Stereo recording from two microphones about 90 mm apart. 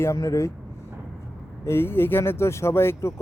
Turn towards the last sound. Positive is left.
turn(degrees=30)  # may be behind; listen again after turning